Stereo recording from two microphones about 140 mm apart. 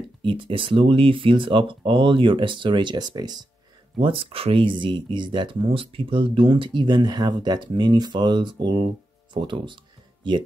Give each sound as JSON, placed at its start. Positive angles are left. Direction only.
{"t": 0.2, "sound": "speech", "side_deg": -35}
{"t": 4.0, "sound": "speech", "side_deg": -40}